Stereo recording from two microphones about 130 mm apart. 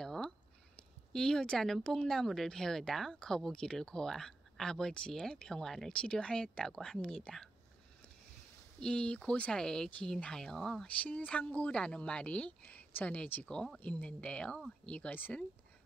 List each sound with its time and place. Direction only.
0.0 s a sound: 5° left (ahead or behind)
1.1 s speech: 5° left (ahead or behind)
8.7 s speech: 5° left (ahead or behind)